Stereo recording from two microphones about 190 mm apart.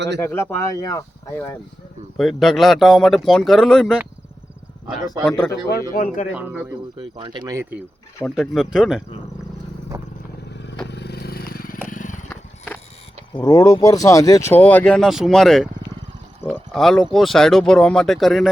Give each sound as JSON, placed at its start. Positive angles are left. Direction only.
{"t": 0.2, "sound": "speech", "side_deg": 10}
{"t": 2.1, "sound": "speech", "side_deg": 0}
{"t": 5.3, "sound": "speech", "side_deg": 15}
{"t": 5.9, "sound": "speech", "side_deg": 45}
{"t": 6.3, "sound": "speech", "side_deg": -5}
{"t": 6.7, "sound": "speech", "side_deg": -25}
{"t": 8.2, "sound": "speech", "side_deg": 0}
{"t": 10.8, "sound": "vehicle", "side_deg": 60}
{"t": 12.3, "sound": "horse", "side_deg": 10}
{"t": 13.3, "sound": "speech", "side_deg": 20}